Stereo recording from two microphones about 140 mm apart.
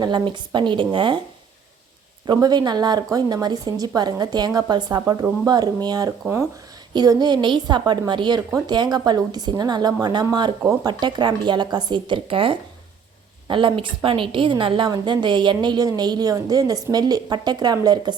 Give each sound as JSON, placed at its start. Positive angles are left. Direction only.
{"t": 0.0, "sound": "a woman's voice", "side_deg": -35}
{"t": 2.2, "sound": "a woman's voice", "side_deg": -30}